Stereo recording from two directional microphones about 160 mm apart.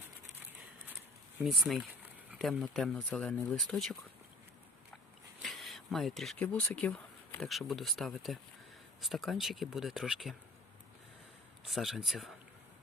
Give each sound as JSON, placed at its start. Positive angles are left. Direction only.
{"t": 1.5, "sound": "speech", "side_deg": 0}
{"t": 5.4, "sound": "speech", "side_deg": 0}
{"t": 11.7, "sound": "speech", "side_deg": 0}